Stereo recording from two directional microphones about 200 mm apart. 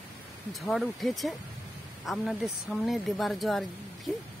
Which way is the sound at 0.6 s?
Centre (ahead or behind).